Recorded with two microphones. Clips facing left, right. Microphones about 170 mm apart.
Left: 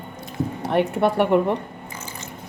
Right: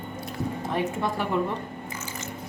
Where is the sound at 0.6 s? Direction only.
70° left (ahead or behind).